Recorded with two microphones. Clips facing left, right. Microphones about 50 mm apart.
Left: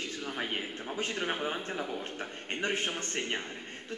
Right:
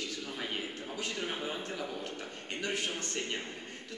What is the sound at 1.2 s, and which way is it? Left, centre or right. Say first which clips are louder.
A man's voice: left 4 dB; left.